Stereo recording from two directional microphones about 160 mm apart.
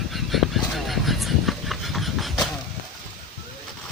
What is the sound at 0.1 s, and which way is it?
Goose, centre (ahead or behind).